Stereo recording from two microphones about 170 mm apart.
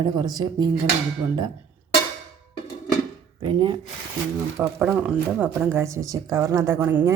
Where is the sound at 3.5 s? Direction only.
25° right (ahead or behind).